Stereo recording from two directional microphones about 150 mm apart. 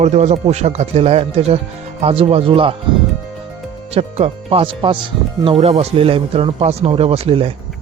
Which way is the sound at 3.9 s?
40° right (ahead or behind).